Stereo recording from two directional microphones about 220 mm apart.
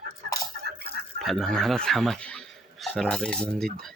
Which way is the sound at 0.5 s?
45° right (ahead or behind).